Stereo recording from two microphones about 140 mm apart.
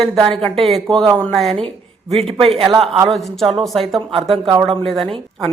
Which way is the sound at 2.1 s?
45° right (ahead or behind).